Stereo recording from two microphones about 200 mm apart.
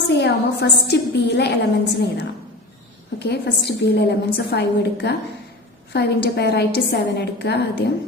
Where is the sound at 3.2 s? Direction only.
55° left (ahead or behind).